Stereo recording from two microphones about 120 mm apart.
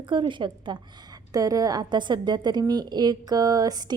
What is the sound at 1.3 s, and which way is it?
A woman's voice, 30° right (ahead or behind).